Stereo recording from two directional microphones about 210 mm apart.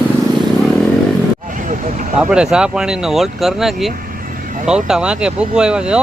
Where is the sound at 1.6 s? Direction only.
40° right (ahead or behind).